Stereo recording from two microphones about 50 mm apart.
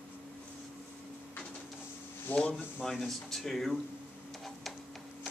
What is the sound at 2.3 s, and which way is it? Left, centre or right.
Speech, left.